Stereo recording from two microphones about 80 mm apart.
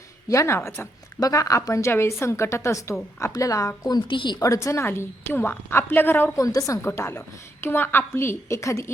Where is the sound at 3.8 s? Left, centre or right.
Left.